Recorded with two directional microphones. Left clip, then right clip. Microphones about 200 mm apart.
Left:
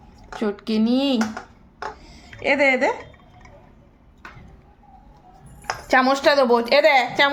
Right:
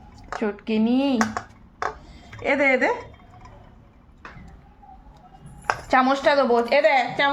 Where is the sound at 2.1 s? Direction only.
15° left (ahead or behind).